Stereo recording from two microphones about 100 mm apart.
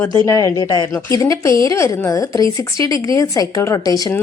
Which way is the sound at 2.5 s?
55° right (ahead or behind).